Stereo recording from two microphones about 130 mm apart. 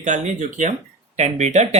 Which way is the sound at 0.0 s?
75° right (ahead or behind).